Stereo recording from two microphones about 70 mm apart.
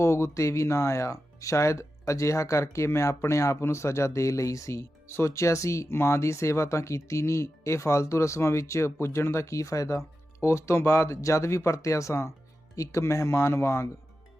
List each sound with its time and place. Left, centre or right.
0.0 s speech: left